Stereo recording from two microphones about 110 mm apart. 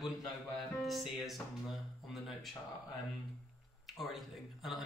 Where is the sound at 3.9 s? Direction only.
Centre (ahead or behind).